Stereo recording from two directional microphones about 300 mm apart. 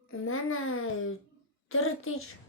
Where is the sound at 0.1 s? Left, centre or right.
Left.